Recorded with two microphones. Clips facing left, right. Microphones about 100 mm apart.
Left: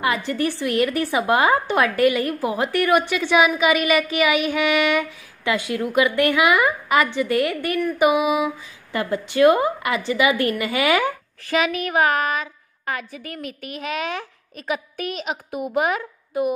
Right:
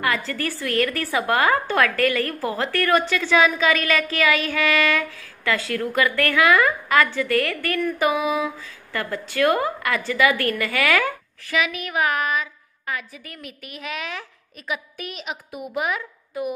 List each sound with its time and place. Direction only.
0.0 s a woman's voice: 20° left (ahead or behind)
11.5 s a woman's voice: 35° left (ahead or behind)
15.2 s a woman's voice: 30° left (ahead or behind)